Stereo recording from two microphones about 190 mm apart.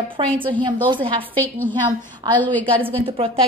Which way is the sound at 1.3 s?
10° left (ahead or behind).